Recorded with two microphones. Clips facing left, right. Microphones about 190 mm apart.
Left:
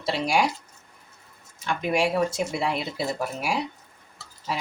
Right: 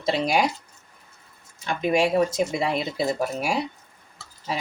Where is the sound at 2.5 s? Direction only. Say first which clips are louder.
Right 2 dB; 15° right (ahead or behind).